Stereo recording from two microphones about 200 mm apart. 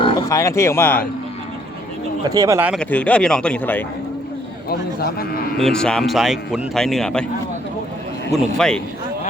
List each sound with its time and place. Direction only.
0.0 s speech: 20° left (ahead or behind)
2.3 s speech: 15° right (ahead or behind)
2.7 s speech: 5° left (ahead or behind)
4.7 s a man's voice: 50° left (ahead or behind)
5.5 s speech: 5° left (ahead or behind)
8.3 s speech: 5° left (ahead or behind)